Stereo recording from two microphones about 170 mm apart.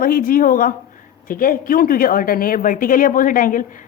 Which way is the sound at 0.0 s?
55° left (ahead or behind).